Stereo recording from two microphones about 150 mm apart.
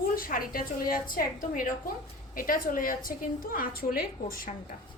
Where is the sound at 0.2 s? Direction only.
70° left (ahead or behind).